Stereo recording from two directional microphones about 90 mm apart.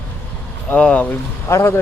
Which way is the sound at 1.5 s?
30° left (ahead or behind).